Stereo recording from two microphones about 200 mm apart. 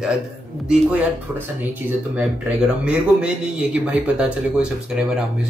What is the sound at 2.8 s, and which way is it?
A man's voice, 5° right (ahead or behind).